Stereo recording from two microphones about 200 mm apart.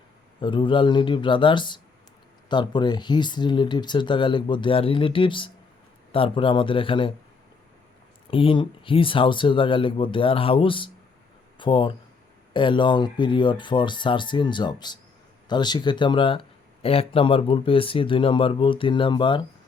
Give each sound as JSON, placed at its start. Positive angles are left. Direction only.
{"t": 0.4, "sound": "speech", "side_deg": 25}
{"t": 8.3, "sound": "speech", "side_deg": 25}